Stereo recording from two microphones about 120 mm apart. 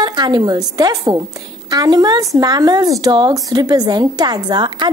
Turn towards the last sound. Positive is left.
turn(degrees=-35)  # may be behind; listen again after turning